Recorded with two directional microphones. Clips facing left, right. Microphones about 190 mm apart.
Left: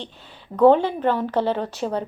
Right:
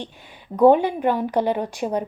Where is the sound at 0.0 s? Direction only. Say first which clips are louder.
Right 2 dB; 15° right (ahead or behind).